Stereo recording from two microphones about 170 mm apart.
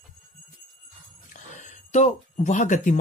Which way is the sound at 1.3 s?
50° left (ahead or behind).